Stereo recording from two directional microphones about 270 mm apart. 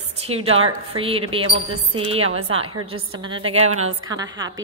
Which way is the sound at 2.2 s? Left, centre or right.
Right.